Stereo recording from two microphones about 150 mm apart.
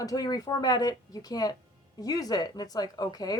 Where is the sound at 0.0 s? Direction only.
25° left (ahead or behind).